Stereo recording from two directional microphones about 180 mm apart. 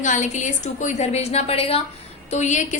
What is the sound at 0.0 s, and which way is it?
A woman's voice, 45° left (ahead or behind).